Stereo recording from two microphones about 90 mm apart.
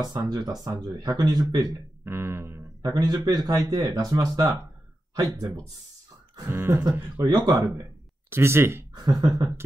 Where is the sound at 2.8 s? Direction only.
45° right (ahead or behind).